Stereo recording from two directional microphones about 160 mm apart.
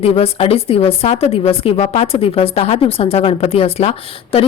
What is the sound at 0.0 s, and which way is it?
A woman's voice, 40° left (ahead or behind).